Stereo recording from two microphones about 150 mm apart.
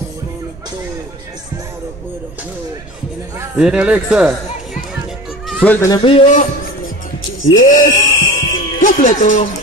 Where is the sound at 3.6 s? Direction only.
10° right (ahead or behind).